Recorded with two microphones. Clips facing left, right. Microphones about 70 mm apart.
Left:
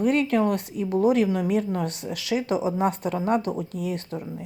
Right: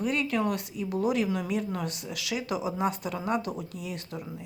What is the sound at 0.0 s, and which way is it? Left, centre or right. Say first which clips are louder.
A woman's voice: left 6 dB; left.